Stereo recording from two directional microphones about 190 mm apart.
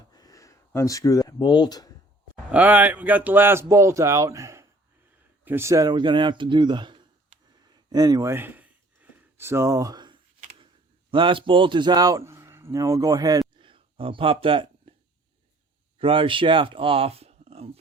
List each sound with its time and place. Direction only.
0.1 s a sound: 20° left (ahead or behind)
2.3 s a man's voice: 10° right (ahead or behind); by 7.0 s 25° right (ahead or behind)
7.6 s gasp: 20° right (ahead or behind)
11.1 s a man's voice: 25° right (ahead or behind)
13.6 s a sound: 25° right (ahead or behind)
16.0 s speech: 25° right (ahead or behind)